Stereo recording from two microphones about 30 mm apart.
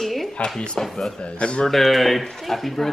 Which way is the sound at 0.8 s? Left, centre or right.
Left.